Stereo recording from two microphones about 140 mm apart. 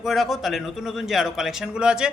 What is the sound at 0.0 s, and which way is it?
A man's voice, centre (ahead or behind).